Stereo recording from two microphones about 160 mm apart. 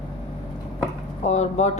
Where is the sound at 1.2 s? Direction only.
45° left (ahead or behind).